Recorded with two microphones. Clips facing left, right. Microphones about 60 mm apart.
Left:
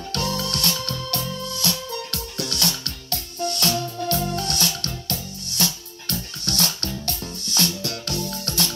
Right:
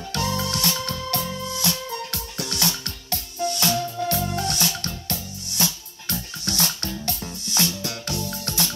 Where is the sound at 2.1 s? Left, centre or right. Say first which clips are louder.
Left 1 dB; left.